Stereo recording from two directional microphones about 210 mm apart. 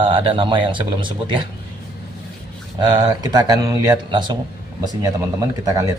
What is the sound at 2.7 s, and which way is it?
A man's voice, 20° right (ahead or behind).